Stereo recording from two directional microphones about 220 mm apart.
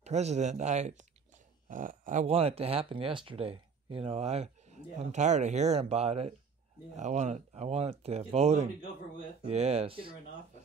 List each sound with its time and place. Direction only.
0.0 s speech: 30° right (ahead or behind)